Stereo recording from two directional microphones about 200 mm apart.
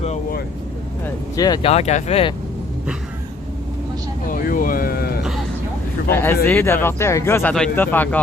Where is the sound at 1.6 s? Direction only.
30° left (ahead or behind).